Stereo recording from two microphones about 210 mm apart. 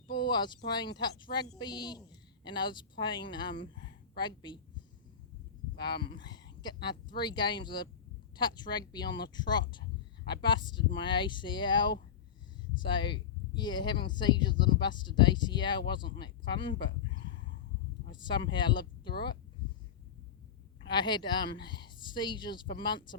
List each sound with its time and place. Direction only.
0.1 s speech: 20° left (ahead or behind)
5.8 s speech: 20° left (ahead or behind)
20.8 s speech: 20° left (ahead or behind)